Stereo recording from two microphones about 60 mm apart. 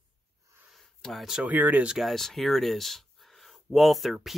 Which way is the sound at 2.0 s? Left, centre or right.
Centre.